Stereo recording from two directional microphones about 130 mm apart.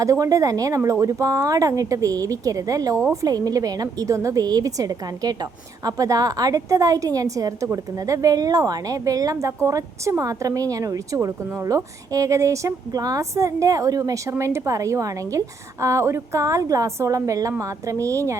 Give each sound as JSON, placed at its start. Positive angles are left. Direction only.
{"t": 0.0, "sound": "a woman's voice", "side_deg": -25}